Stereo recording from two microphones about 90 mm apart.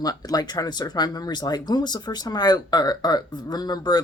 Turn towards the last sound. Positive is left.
turn(degrees=50)  # may be behind; listen again after turning